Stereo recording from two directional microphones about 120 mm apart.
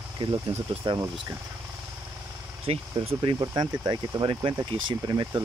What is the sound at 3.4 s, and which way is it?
Speech, 35° right (ahead or behind).